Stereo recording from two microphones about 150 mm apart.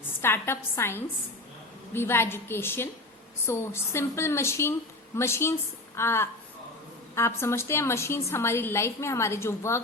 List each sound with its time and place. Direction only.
0.2 s a woman's voice: 15° left (ahead or behind)